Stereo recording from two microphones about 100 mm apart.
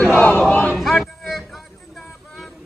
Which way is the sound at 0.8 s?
Centre (ahead or behind).